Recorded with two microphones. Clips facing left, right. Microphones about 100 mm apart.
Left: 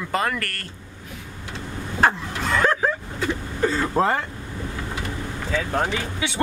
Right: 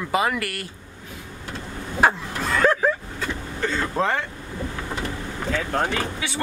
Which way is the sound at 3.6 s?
10° left (ahead or behind).